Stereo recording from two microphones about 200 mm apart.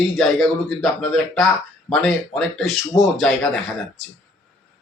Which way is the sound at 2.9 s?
15° left (ahead or behind).